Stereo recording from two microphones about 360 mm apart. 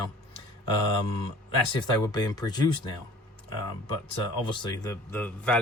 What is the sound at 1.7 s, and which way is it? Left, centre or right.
A man's voice, centre.